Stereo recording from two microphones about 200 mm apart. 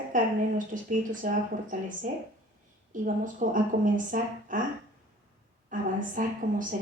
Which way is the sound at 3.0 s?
40° right (ahead or behind).